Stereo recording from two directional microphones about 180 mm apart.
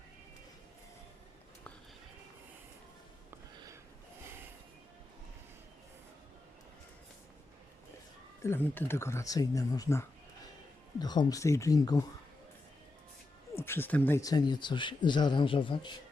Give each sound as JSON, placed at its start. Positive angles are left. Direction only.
{"t": 8.4, "sound": "speech", "side_deg": 15}
{"t": 13.6, "sound": "speech", "side_deg": 15}
{"t": 14.2, "sound": "speech", "side_deg": 20}